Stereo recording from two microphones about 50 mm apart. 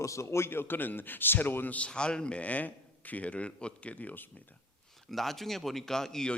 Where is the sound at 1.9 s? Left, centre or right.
Centre; by 4.3 s left.